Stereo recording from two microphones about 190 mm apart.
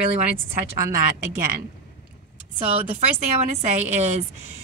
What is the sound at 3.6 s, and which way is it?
Speech, 35° right (ahead or behind).